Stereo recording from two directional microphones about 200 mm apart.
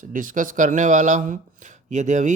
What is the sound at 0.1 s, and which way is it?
Speech, 40° right (ahead or behind).